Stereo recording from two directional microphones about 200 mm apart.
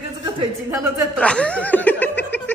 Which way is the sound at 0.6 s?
10° right (ahead or behind).